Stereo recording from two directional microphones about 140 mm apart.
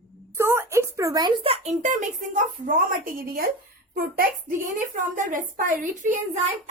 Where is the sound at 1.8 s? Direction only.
60° right (ahead or behind); by 4.6 s 85° right.